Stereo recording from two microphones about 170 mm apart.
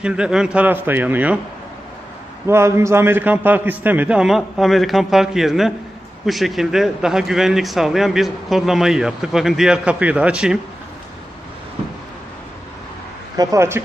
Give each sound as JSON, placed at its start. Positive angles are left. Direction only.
{"t": 0.0, "sound": "a man's voice", "side_deg": -5}
{"t": 2.5, "sound": "a man's voice", "side_deg": -15}
{"t": 13.3, "sound": "a man's voice", "side_deg": -20}